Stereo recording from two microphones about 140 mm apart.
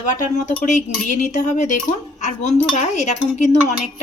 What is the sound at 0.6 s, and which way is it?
Speech, 65° left (ahead or behind).